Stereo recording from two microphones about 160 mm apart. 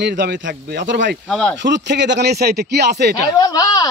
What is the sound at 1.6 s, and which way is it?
Speech, 90° right.